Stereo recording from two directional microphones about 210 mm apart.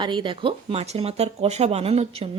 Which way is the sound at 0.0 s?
20° right (ahead or behind).